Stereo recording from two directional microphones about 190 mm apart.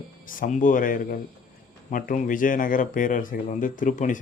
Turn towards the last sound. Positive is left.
turn(degrees=40)  # may be behind; listen again after turning